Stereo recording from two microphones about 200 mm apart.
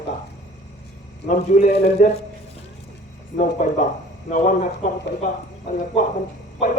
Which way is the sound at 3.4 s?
40° left (ahead or behind).